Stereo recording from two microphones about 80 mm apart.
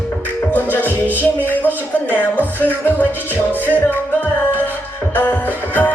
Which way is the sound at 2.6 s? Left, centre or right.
Left.